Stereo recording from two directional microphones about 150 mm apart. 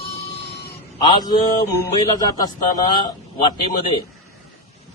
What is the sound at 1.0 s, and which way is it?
A man's voice, 25° left (ahead or behind).